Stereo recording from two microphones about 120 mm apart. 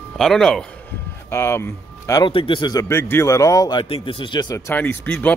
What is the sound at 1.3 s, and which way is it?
Speech, 20° left (ahead or behind).